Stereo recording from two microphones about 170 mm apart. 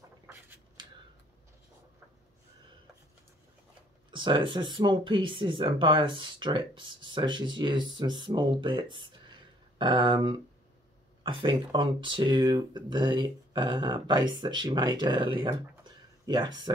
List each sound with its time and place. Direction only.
4.1 s speech: 30° right (ahead or behind)